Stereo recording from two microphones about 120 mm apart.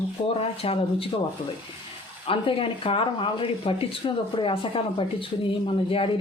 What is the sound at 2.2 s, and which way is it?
Speech, 50° left (ahead or behind).